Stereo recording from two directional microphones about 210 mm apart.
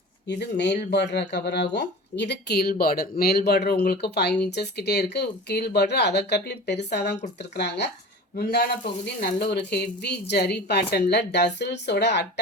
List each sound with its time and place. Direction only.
0.3 s speech: 55° left (ahead or behind)